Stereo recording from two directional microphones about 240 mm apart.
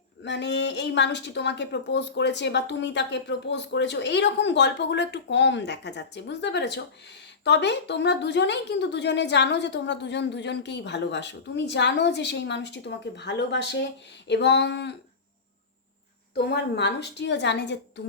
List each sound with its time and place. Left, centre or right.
0.2 s a woman's voice: left
16.3 s a woman's voice: left